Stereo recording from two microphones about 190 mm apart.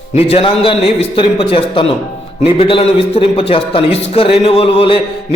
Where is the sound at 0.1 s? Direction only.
30° left (ahead or behind).